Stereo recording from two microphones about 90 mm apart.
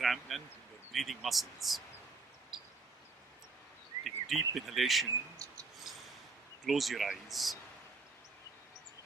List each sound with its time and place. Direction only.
0.0 s speech: centre (ahead or behind)
2.5 s a sound: 5° right (ahead or behind)
4.0 s speech: centre (ahead or behind)
5.4 s mouse: 35° right (ahead or behind)
5.9 s a sound: centre (ahead or behind)
6.7 s speech: centre (ahead or behind)